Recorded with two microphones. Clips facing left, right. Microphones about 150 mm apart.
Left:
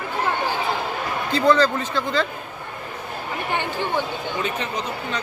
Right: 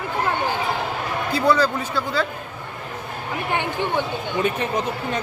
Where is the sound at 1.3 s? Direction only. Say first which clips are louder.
Left 2 dB; 10° right (ahead or behind).